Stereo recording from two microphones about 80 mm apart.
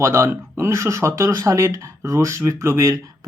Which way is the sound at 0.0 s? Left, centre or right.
Right.